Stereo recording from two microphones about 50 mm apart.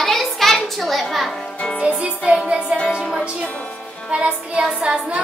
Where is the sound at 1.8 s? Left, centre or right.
Right.